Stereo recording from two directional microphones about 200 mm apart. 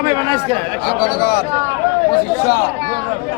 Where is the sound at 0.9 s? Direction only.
50° left (ahead or behind).